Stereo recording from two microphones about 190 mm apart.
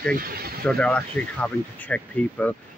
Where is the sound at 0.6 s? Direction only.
5° left (ahead or behind).